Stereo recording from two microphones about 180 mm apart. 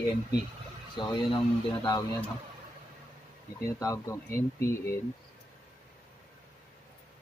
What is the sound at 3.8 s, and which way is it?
Speech, 15° left (ahead or behind).